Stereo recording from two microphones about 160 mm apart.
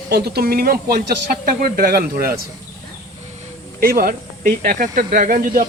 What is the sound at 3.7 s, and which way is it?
Speech, 65° right (ahead or behind).